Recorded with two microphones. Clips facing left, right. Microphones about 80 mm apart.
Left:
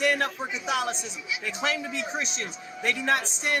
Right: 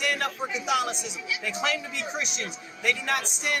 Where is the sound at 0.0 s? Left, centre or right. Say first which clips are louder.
Left 4 dB; left.